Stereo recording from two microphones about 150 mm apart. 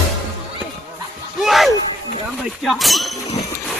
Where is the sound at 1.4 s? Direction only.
Centre (ahead or behind).